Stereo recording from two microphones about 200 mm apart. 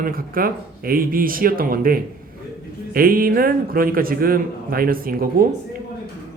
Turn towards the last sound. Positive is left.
turn(degrees=-45)  # may be behind; listen again after turning